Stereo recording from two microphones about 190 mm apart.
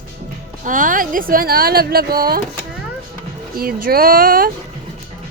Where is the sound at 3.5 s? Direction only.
50° right (ahead or behind).